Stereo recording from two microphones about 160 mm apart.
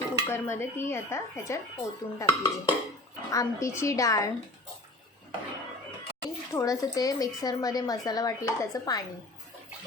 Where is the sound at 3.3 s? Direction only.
20° left (ahead or behind).